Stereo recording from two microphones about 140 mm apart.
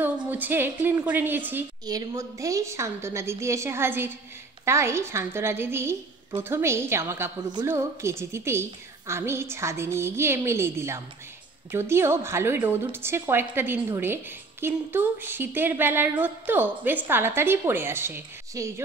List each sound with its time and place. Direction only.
0.0 s a woman's voice: 15° right (ahead or behind)
1.9 s a woman's voice: 25° right (ahead or behind)